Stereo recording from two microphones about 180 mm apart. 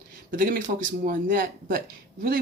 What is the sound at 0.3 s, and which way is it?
Speech, 50° right (ahead or behind).